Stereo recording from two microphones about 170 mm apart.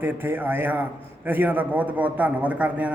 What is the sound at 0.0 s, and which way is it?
A man's voice, 10° right (ahead or behind).